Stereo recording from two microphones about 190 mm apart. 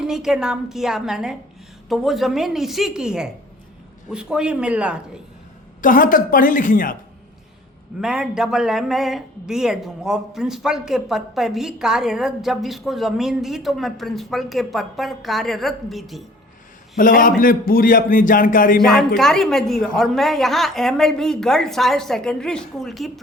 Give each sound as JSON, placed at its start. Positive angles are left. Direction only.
{"t": 0.0, "sound": "speech", "side_deg": -5}
{"t": 5.8, "sound": "a man's voice", "side_deg": 45}
{"t": 8.0, "sound": "speech", "side_deg": -5}
{"t": 17.0, "sound": "a man's voice", "side_deg": 45}
{"t": 18.9, "sound": "speech", "side_deg": 0}